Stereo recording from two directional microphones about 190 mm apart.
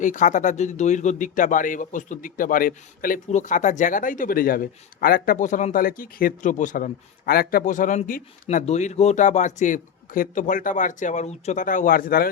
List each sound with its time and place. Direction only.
0.0 s speech: 40° left (ahead or behind)